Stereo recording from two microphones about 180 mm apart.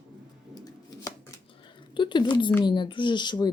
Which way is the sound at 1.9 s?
25° left (ahead or behind).